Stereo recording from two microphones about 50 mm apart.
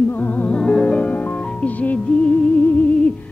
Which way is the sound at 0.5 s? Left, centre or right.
Left.